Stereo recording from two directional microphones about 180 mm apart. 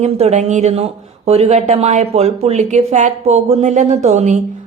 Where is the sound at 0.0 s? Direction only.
35° right (ahead or behind).